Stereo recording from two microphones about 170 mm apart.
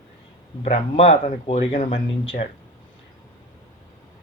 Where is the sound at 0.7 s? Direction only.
35° left (ahead or behind).